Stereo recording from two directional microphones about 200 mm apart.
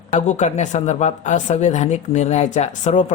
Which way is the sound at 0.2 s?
35° left (ahead or behind).